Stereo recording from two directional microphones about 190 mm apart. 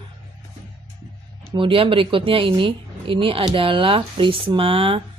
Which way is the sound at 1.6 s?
25° right (ahead or behind).